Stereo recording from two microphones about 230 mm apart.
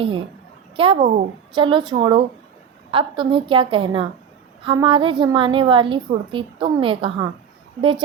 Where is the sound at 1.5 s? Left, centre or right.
Right.